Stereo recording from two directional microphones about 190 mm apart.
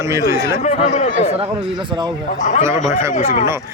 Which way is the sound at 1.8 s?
25° right (ahead or behind).